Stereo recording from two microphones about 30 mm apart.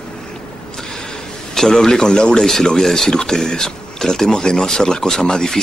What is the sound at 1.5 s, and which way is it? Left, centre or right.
Speech, centre.